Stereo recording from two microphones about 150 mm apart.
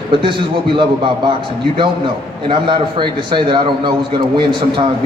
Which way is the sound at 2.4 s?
30° right (ahead or behind).